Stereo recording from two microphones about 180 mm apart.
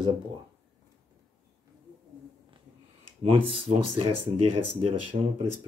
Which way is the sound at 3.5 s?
30° right (ahead or behind).